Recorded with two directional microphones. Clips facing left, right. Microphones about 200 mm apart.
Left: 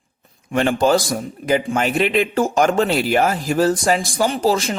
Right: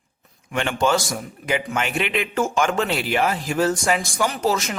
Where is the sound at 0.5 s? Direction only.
35° left (ahead or behind).